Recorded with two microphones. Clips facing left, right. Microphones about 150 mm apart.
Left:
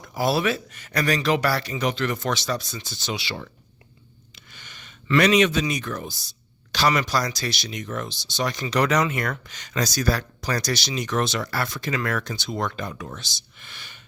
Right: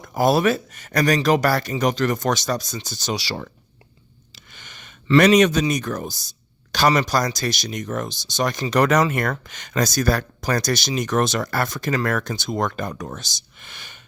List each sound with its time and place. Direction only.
0.0 s speech: 50° right (ahead or behind)
4.5 s a sound: 50° right (ahead or behind)
5.0 s speech: 40° right (ahead or behind)